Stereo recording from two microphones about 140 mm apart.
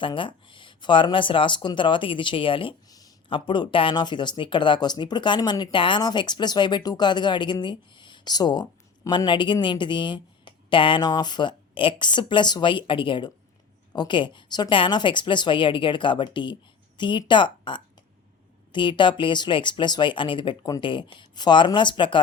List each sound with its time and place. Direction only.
0.0 s speech: 35° left (ahead or behind)